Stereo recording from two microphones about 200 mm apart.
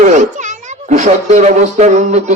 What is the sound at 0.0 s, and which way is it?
A child's voice, 35° right (ahead or behind).